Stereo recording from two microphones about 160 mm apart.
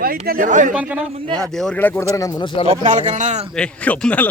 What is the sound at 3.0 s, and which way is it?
Speech, 45° right (ahead or behind).